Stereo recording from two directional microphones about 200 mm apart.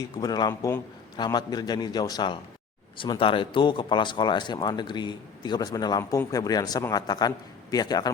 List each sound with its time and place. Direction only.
0.2 s speech: 20° left (ahead or behind)